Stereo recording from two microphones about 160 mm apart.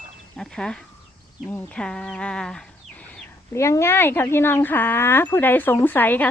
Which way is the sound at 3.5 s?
20° left (ahead or behind).